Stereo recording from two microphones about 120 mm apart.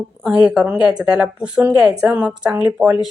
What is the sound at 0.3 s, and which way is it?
A woman's voice, 10° right (ahead or behind).